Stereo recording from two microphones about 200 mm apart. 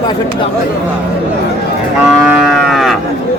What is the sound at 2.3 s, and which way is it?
Livestock, centre (ahead or behind).